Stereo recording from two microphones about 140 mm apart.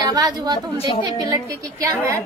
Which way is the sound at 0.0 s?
30° right (ahead or behind).